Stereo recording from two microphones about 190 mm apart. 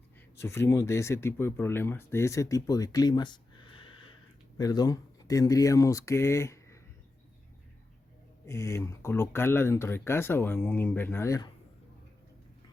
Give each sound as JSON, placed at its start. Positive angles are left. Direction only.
{"t": 0.3, "sound": "speech", "side_deg": 15}
{"t": 8.4, "sound": "speech", "side_deg": 15}